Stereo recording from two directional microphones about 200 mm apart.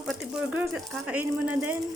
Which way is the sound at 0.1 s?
Centre (ahead or behind).